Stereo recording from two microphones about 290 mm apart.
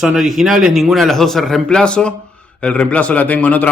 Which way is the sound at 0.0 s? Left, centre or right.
Centre.